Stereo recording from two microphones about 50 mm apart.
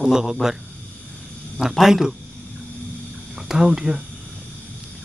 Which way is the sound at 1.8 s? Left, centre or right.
Centre.